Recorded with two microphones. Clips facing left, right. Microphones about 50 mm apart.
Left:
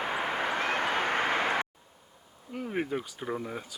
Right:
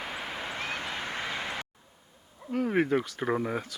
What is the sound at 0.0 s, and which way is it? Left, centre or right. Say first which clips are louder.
Vehicle: left 6 dB; left.